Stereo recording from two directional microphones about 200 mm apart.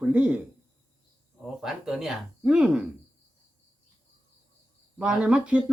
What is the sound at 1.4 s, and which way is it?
A man's voice, centre (ahead or behind).